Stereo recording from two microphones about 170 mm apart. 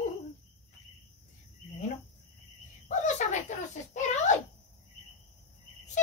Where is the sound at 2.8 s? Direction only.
45° left (ahead or behind).